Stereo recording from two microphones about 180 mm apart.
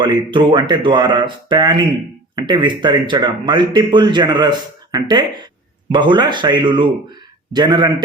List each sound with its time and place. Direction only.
0.0 s speech: 25° right (ahead or behind)